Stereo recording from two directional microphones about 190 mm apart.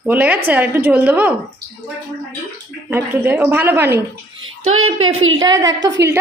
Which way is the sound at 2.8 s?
10° right (ahead or behind).